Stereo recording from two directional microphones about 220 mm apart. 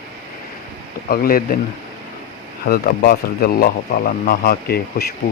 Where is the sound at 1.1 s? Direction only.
40° left (ahead or behind).